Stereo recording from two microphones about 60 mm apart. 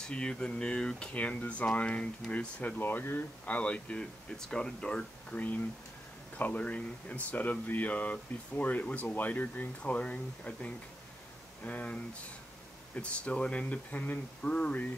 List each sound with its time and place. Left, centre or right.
0.1 s speech: centre